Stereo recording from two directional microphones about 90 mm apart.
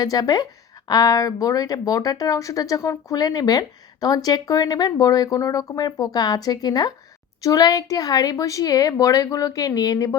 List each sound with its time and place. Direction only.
0.0 s speech: 45° left (ahead or behind)